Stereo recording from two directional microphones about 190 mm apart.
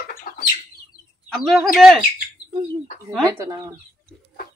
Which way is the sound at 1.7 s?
Centre (ahead or behind).